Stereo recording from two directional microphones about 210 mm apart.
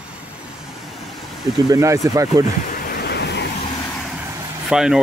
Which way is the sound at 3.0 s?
55° left (ahead or behind).